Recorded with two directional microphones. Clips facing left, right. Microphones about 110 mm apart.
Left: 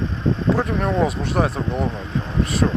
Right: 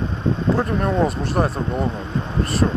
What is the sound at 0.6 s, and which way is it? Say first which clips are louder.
Speech: right 1 dB; centre (ahead or behind).